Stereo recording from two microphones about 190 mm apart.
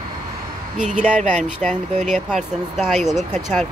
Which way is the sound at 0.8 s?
40° right (ahead or behind).